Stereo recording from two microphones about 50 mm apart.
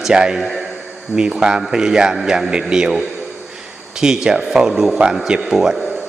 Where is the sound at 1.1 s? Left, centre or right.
Centre.